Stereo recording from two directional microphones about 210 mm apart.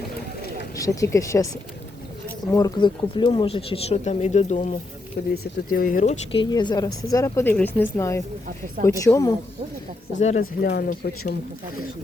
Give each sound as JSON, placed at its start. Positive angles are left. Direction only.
{"t": 0.8, "sound": "a woman's voice", "side_deg": 15}
{"t": 2.5, "sound": "speech", "side_deg": 15}
{"t": 5.2, "sound": "speech", "side_deg": 45}
{"t": 6.3, "sound": "a woman's voice", "side_deg": 20}
{"t": 10.2, "sound": "speech", "side_deg": 35}
{"t": 10.6, "sound": "speech", "side_deg": 45}